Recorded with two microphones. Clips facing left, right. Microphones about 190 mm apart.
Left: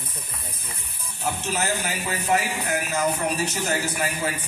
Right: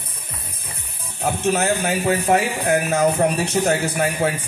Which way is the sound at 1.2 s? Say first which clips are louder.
Right 7 dB; 60° right (ahead or behind).